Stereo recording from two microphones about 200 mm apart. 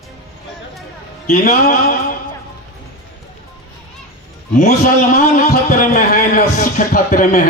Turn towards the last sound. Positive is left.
turn(degrees=40)  # may be behind; listen again after turning